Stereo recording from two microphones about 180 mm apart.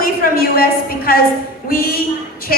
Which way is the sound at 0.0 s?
55° left (ahead or behind).